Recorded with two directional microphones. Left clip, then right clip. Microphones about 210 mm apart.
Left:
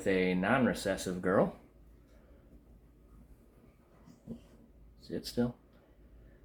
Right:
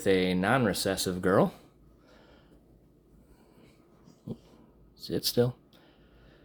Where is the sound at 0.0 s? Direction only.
45° right (ahead or behind).